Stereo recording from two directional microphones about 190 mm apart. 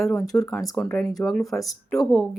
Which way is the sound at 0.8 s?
5° left (ahead or behind).